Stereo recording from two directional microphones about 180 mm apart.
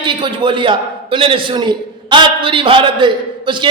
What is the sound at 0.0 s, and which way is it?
A man's voice, 25° right (ahead or behind).